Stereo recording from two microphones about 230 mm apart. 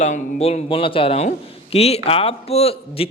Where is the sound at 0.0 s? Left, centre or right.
Left.